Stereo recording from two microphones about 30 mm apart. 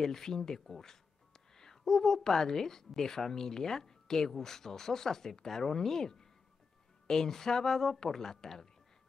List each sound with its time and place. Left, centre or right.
0.0 s a woman's voice: centre